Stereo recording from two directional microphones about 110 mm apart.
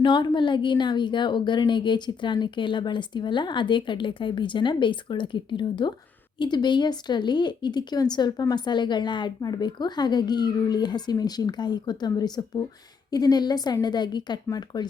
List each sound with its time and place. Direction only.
0.0 s a woman's voice: 45° left (ahead or behind)